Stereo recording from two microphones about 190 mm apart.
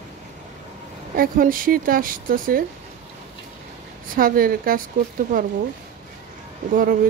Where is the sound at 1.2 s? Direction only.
50° right (ahead or behind).